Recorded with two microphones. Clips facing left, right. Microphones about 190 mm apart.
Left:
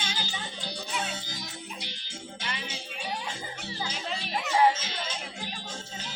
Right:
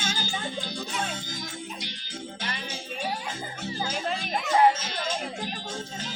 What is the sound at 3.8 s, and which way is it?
Music, 50° right (ahead or behind).